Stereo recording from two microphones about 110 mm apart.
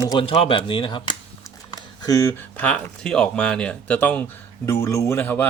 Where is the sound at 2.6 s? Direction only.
10° left (ahead or behind).